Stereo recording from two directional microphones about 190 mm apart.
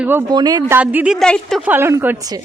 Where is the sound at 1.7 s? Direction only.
10° right (ahead or behind).